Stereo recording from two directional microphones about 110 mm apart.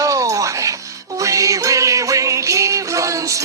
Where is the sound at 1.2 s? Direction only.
30° right (ahead or behind).